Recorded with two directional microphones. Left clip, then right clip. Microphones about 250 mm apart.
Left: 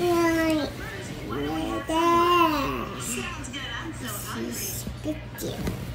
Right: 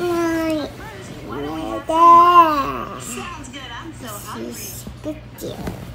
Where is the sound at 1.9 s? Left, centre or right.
Right.